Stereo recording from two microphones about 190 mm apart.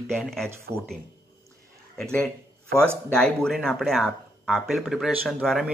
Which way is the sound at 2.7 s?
55° right (ahead or behind).